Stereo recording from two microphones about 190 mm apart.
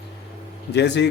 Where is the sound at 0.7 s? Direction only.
65° left (ahead or behind).